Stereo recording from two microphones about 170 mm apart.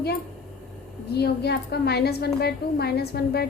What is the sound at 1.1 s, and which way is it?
A woman's voice, 70° left (ahead or behind).